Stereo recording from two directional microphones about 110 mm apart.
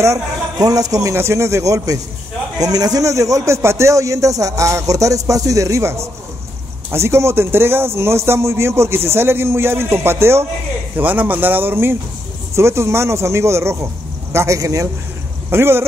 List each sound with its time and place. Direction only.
0.0 s a man's voice: 30° right (ahead or behind)